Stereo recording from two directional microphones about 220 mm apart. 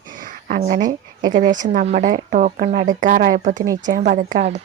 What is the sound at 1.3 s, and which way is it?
Speech, 35° right (ahead or behind).